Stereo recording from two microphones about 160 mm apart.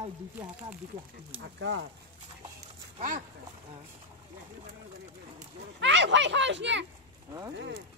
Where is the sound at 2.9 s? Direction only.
55° right (ahead or behind).